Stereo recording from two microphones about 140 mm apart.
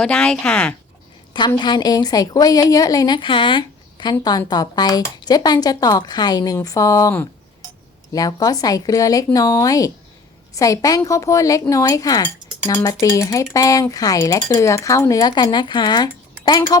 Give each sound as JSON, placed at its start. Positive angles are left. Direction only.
{"t": 0.0, "sound": "speech", "side_deg": 5}
{"t": 1.5, "sound": "a woman's voice", "side_deg": 30}